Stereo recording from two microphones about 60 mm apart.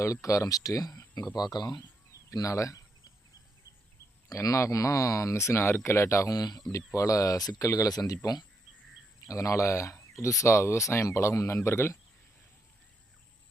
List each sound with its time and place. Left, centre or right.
0.0 s speech: left
2.1 s speech: left
4.3 s speech: left
5.3 s speech: left
9.2 s speech: left